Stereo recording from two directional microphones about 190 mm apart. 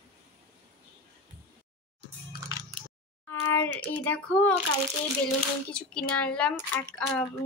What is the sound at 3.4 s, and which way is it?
Speech, 10° left (ahead or behind).